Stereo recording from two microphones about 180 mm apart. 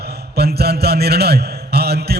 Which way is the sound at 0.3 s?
60° right (ahead or behind).